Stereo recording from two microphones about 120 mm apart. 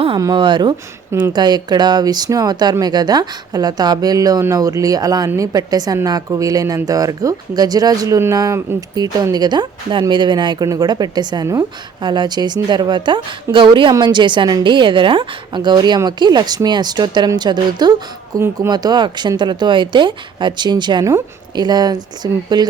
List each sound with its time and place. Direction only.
0.2 s a woman's voice: 35° right (ahead or behind)
18.3 s speech: 20° right (ahead or behind)
18.7 s a woman's voice: 35° right (ahead or behind)